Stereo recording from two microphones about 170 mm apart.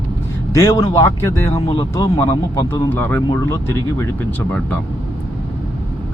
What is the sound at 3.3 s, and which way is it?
Speech, 15° left (ahead or behind).